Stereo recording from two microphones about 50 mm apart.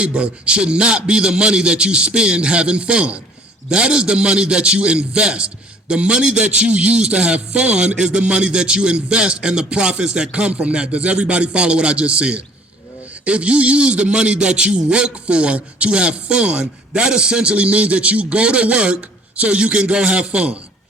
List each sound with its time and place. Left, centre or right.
0.0 s a man's voice: right